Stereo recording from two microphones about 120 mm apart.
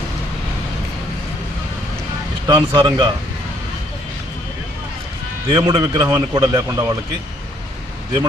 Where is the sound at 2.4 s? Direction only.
40° right (ahead or behind).